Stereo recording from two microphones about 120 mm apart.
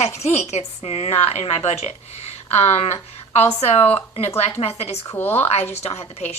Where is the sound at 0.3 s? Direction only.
65° left (ahead or behind).